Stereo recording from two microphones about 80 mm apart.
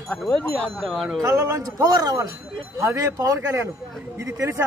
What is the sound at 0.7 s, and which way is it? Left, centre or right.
Speech, centre.